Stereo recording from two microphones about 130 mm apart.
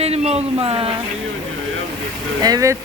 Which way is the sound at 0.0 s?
50° right (ahead or behind).